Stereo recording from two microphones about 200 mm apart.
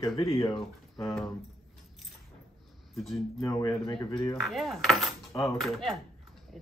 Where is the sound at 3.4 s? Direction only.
15° left (ahead or behind).